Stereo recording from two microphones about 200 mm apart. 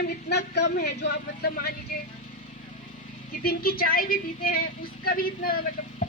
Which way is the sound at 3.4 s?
45° left (ahead or behind).